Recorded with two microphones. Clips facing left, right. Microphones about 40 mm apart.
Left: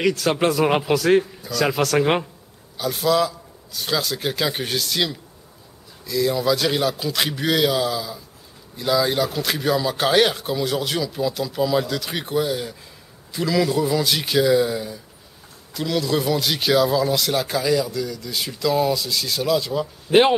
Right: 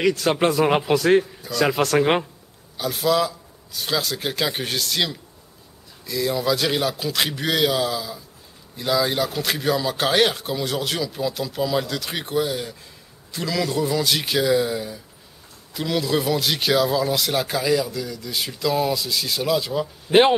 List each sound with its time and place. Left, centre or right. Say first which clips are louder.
0.1 s a man's voice: even; centre